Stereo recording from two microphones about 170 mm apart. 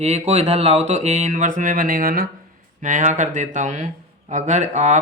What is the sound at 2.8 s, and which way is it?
Speech, 45° right (ahead or behind).